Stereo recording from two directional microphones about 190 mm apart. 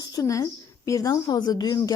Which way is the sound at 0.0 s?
20° left (ahead or behind).